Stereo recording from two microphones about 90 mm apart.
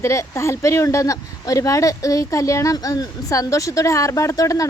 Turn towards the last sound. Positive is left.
turn(degrees=40)  # may be behind; listen again after turning